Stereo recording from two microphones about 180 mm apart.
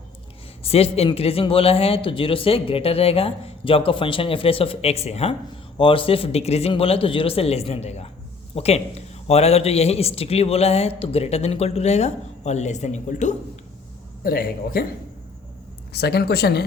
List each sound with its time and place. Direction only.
0.6 s a man's voice: 35° left (ahead or behind)
14.3 s speech: 55° left (ahead or behind)
15.9 s speech: 65° left (ahead or behind)